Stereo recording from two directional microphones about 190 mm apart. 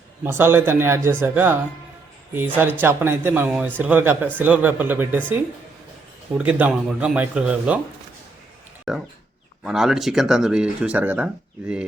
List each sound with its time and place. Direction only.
0.3 s speech: 10° right (ahead or behind)
6.3 s speech: 5° right (ahead or behind)
8.9 s speech: centre (ahead or behind)